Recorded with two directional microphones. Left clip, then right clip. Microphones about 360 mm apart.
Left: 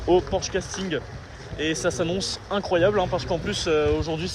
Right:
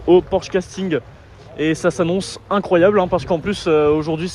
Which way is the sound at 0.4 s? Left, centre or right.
Centre.